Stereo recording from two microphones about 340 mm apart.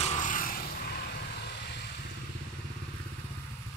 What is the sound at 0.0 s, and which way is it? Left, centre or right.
Vehicle, left.